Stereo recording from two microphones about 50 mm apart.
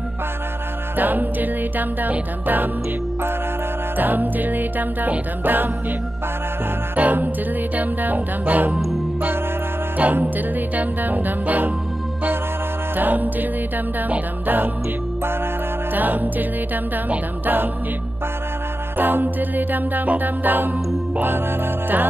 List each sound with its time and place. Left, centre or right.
0.9 s music: right
3.9 s music: right
7.0 s music: right
9.9 s music: right
12.9 s music: right
15.9 s music: right
18.9 s music: right